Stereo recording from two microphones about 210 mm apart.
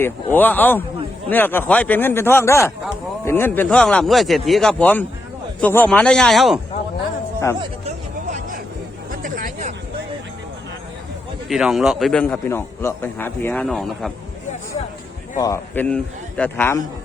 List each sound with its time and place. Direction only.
0.0 s a man's voice: 10° left (ahead or behind)
7.9 s hubbub: 35° right (ahead or behind)
9.2 s a sound: 40° right (ahead or behind)
11.4 s a man's voice: centre (ahead or behind)
15.4 s a man's voice: 15° left (ahead or behind)